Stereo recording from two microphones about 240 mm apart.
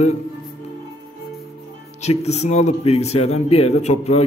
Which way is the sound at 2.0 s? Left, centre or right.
Left.